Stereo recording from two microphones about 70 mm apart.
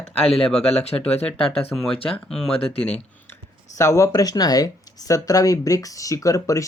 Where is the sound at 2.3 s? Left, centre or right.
Centre.